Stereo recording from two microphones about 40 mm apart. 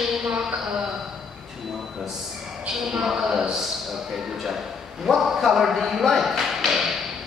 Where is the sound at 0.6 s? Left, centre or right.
Centre.